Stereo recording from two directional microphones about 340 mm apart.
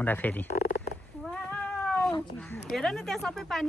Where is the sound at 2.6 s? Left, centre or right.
Centre.